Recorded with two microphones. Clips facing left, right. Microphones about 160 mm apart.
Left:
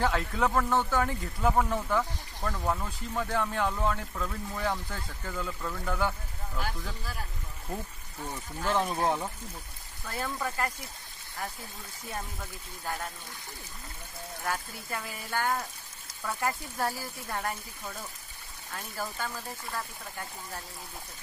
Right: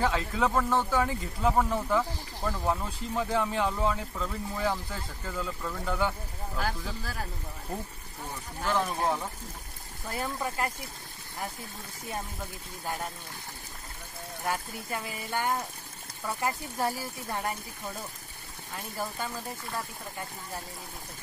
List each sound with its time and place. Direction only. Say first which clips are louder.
0.0 s speech: even; centre (ahead or behind)
8.7 s speech: left 1 dB; 20° left (ahead or behind)
10.0 s speech: right 1 dB; 15° right (ahead or behind)
14.4 s speech: right 2 dB; 15° right (ahead or behind)
18.9 s speech: right 1 dB; 15° right (ahead or behind)